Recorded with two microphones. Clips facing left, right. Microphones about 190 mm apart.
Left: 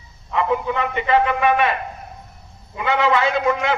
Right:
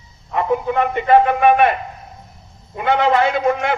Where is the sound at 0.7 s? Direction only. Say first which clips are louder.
Right 5 dB; 55° right (ahead or behind).